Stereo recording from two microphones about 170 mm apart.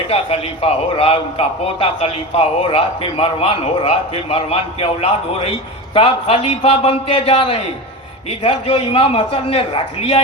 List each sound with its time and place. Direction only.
0.1 s a man's voice: 35° left (ahead or behind)